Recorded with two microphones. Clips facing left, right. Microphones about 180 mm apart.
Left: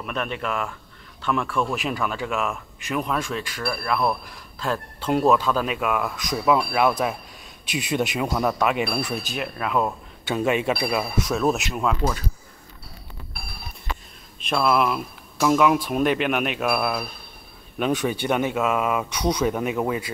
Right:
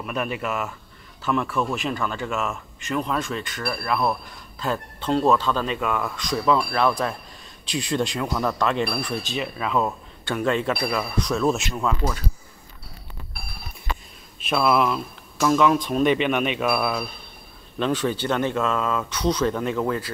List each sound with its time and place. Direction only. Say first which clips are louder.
0.0 s speech: right 1 dB; 5° right (ahead or behind)
14.4 s speech: right 1 dB; centre (ahead or behind)
15.4 s speech: even; 10° left (ahead or behind)